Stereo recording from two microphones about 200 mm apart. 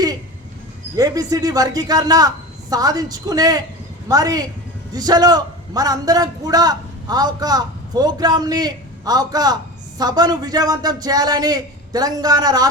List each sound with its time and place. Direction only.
0.9 s a man's voice: 20° right (ahead or behind)